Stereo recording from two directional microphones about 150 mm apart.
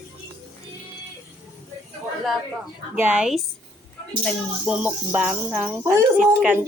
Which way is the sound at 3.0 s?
10° right (ahead or behind).